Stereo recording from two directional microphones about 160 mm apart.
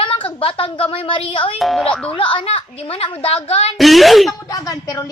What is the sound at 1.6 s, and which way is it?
Speech, centre (ahead or behind).